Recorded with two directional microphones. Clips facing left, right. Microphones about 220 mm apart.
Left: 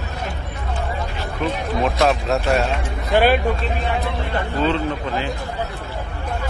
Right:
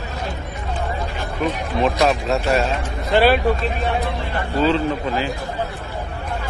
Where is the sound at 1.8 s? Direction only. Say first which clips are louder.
Right 1 dB; centre (ahead or behind).